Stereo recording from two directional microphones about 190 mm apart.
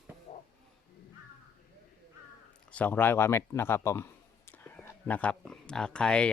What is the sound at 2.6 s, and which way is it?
Speech, 5° left (ahead or behind).